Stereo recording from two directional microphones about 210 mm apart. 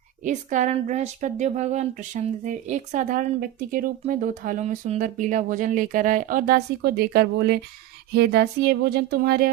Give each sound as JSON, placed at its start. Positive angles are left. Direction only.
{"t": 0.3, "sound": "speech", "side_deg": -35}